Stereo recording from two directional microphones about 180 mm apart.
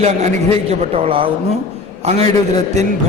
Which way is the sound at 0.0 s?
35° right (ahead or behind).